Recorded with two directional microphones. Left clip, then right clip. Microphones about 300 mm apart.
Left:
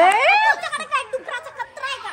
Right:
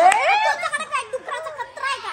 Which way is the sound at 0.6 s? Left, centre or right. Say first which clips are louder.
Even; centre.